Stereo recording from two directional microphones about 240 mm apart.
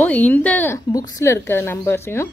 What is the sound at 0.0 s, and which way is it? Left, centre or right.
A woman's voice, centre.